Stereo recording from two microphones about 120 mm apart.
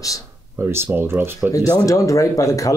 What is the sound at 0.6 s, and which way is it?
Speech, 20° right (ahead or behind).